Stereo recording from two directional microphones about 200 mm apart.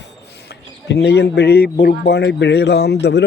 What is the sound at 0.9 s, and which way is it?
A man's voice, 55° left (ahead or behind).